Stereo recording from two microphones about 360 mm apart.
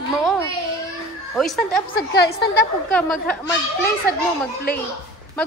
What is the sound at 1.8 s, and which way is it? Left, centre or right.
Speech, left.